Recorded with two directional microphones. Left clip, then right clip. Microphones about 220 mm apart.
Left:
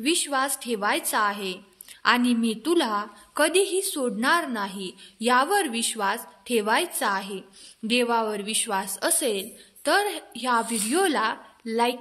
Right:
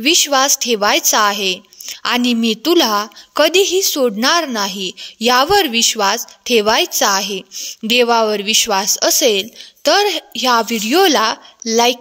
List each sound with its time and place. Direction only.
0.0 s a woman's voice: 40° right (ahead or behind)